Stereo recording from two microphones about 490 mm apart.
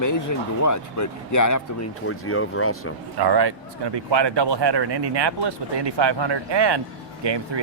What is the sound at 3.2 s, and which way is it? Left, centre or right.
Speech, right.